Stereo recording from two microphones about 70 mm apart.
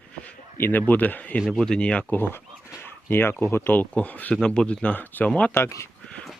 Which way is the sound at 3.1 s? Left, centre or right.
Left.